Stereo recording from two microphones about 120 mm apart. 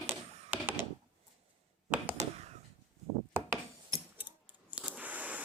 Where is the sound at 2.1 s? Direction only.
65° right (ahead or behind).